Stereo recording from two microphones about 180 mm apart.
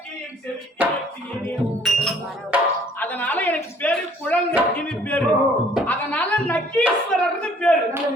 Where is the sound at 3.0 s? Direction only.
10° left (ahead or behind).